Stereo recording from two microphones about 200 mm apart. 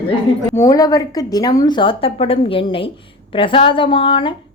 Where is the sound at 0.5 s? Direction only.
15° left (ahead or behind).